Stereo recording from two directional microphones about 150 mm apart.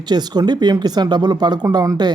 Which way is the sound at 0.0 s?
30° right (ahead or behind).